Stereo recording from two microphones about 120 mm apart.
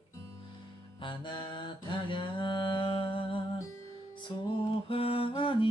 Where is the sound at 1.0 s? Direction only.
40° left (ahead or behind).